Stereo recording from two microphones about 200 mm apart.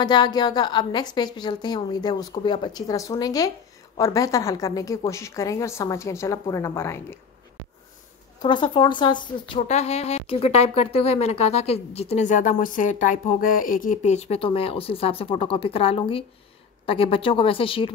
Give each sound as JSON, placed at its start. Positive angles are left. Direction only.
{"t": 0.0, "sound": "a woman's voice", "side_deg": 20}
{"t": 8.4, "sound": "a woman's voice", "side_deg": 25}